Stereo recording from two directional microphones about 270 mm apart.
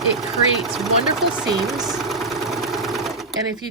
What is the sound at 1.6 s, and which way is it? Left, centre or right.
Sewing machine, centre.